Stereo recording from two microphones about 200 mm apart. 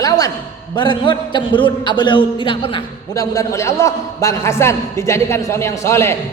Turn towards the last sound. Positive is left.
turn(degrees=15)  # may be behind; listen again after turning